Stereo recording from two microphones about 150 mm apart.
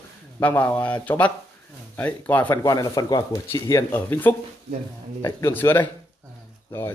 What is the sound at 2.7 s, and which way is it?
Speech, 25° left (ahead or behind).